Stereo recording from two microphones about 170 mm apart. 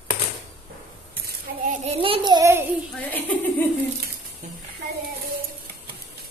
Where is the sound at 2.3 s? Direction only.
15° right (ahead or behind).